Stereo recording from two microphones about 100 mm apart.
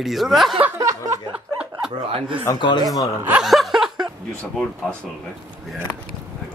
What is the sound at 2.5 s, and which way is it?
Speech, 50° left (ahead or behind).